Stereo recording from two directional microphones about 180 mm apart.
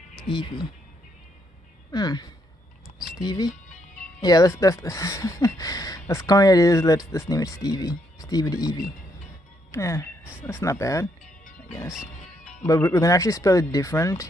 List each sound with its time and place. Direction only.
0.3 s speech: 25° left (ahead or behind)
1.9 s speech: 20° left (ahead or behind)
12.6 s speech: 15° left (ahead or behind)